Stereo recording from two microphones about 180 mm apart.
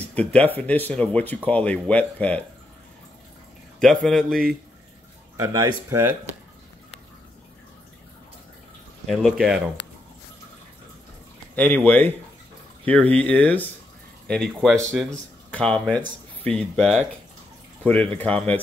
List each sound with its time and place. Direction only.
0.1 s speech: 10° left (ahead or behind)
3.8 s a man's voice: 5° left (ahead or behind)
5.4 s speech: 20° right (ahead or behind)
9.0 s a man's voice: centre (ahead or behind)
11.5 s a man's voice: 10° left (ahead or behind)